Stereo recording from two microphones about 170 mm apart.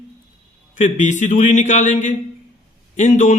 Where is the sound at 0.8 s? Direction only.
45° left (ahead or behind).